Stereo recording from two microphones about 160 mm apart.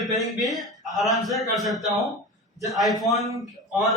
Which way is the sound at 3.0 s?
Centre (ahead or behind).